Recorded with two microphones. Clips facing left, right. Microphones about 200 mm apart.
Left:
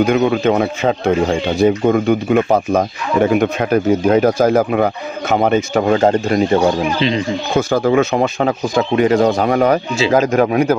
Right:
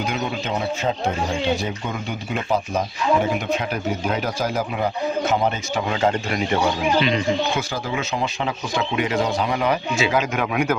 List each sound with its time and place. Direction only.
0.0 s speech: 60° left (ahead or behind); by 7.6 s 30° left (ahead or behind)
7.7 s speech: 55° left (ahead or behind)
9.9 s speech: 35° left (ahead or behind)